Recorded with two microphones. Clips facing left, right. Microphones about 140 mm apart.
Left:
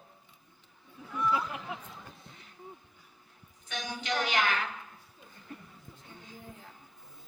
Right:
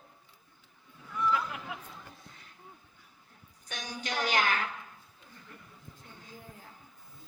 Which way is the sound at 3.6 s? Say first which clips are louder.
Left 3 dB; 40° right (ahead or behind).